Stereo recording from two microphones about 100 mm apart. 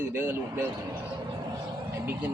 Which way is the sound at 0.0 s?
20° right (ahead or behind).